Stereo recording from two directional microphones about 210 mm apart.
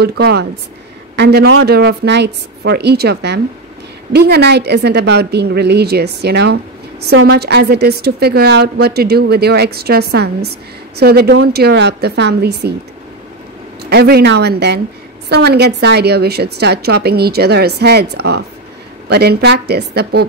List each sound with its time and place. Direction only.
0.0 s a woman's voice: 50° right (ahead or behind)
13.8 s a woman's voice: 50° right (ahead or behind)